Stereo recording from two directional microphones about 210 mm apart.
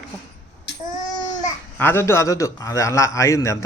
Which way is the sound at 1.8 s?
10° left (ahead or behind).